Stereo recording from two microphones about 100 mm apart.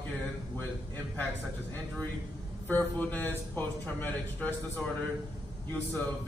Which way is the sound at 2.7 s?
15° left (ahead or behind).